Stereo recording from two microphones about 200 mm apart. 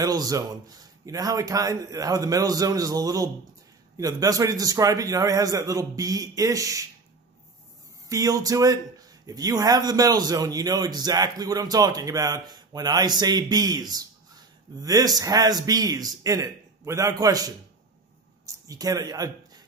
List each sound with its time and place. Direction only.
0.0 s a man's voice: 20° right (ahead or behind)
8.1 s a man's voice: 15° right (ahead or behind)
18.4 s a sound: 20° right (ahead or behind)